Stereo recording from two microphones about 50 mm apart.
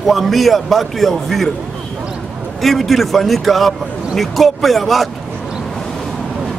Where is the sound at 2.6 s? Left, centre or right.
Centre.